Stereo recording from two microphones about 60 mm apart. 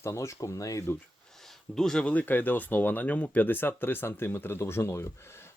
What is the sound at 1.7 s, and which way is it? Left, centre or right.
Speech, centre.